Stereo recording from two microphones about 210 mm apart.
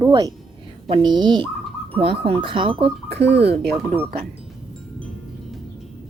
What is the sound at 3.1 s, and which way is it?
Speech, 55° right (ahead or behind).